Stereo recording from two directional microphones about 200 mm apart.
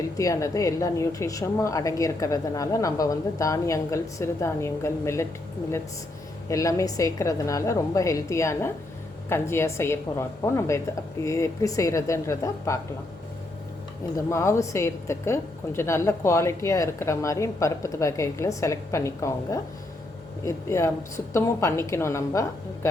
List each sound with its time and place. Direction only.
0.2 s a woman's voice: 15° left (ahead or behind)
6.5 s a woman's voice: 15° left (ahead or behind)
14.3 s a woman's voice: 15° left (ahead or behind)